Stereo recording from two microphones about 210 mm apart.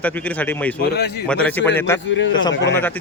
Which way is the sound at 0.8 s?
50° left (ahead or behind).